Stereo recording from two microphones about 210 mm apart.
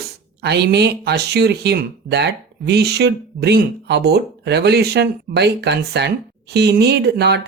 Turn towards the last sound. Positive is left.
turn(degrees=-50)  # may be behind; listen again after turning